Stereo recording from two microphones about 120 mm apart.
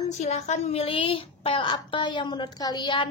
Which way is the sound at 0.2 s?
80° left.